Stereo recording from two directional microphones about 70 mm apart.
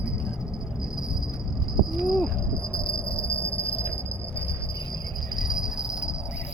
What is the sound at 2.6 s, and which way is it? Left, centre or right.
Cricket, centre.